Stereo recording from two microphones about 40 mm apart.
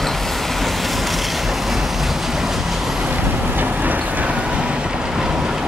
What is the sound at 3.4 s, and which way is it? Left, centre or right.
Vehicle, right.